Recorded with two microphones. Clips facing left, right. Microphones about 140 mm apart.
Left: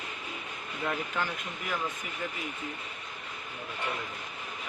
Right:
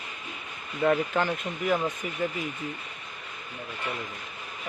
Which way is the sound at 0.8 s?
55° right (ahead or behind).